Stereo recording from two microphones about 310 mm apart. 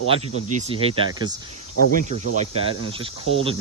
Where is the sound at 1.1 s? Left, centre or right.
Centre.